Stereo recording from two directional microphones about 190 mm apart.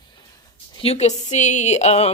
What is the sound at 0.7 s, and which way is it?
Speech, 30° left (ahead or behind).